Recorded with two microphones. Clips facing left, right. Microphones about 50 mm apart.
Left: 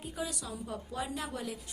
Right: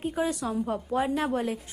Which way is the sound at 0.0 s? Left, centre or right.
Right.